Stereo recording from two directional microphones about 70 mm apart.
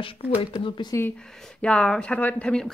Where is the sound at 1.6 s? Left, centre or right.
Centre.